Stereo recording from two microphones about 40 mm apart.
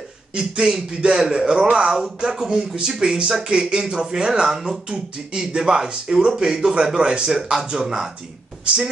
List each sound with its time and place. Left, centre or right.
0.4 s speech: centre